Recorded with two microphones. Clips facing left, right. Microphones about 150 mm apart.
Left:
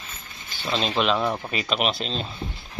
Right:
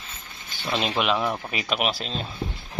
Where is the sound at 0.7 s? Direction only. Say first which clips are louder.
Left 1 dB; 10° right (ahead or behind).